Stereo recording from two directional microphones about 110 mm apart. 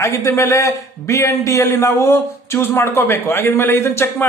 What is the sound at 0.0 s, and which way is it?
A man's voice, 30° left (ahead or behind).